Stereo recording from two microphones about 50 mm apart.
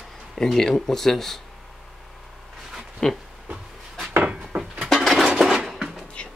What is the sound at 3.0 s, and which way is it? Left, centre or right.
Speech, centre.